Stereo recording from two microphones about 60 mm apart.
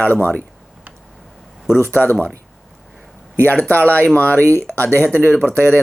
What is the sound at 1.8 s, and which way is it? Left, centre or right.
Speech, left.